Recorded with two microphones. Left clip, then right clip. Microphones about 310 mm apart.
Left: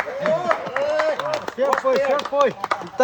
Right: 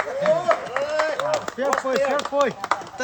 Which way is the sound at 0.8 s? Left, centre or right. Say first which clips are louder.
Left 2 dB; centre.